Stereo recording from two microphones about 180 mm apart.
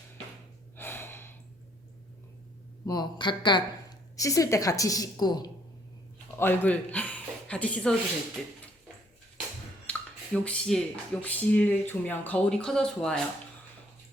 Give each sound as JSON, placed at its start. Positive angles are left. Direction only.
{"t": 0.8, "sound": "gasp", "side_deg": 10}
{"t": 2.8, "sound": "a woman's voice", "side_deg": 20}
{"t": 6.4, "sound": "speech", "side_deg": 10}
{"t": 9.9, "sound": "finger snapping", "side_deg": 10}
{"t": 10.3, "sound": "speech", "side_deg": 5}